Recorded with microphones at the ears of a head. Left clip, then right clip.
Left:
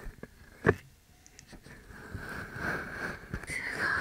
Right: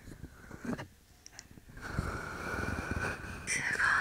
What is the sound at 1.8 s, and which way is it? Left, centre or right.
Wheeze, right.